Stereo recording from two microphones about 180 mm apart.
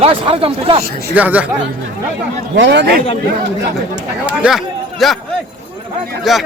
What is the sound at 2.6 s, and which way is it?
Speech, 70° right (ahead or behind).